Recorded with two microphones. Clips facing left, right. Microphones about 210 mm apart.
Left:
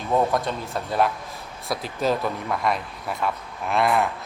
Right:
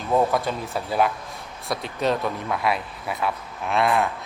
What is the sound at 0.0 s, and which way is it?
A man's voice, centre (ahead or behind).